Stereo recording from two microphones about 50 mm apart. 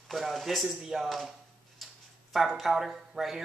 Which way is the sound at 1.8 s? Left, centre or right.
Centre.